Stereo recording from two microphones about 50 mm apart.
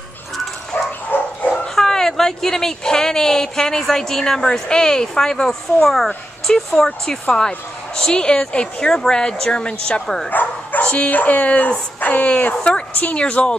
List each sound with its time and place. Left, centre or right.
0.7 s dog: left
1.8 s speech: centre
10.0 s speech: centre
10.3 s bow-wow: left
11.1 s speech: left
12.0 s a sound: left
12.3 s a woman's voice: left